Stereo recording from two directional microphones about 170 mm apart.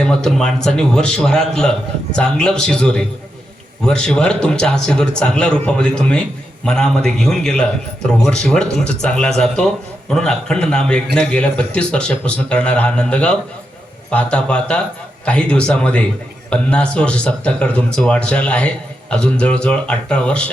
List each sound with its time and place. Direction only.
0.0 s a man's voice: 5° left (ahead or behind)